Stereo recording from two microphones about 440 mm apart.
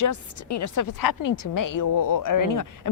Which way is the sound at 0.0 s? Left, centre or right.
Left.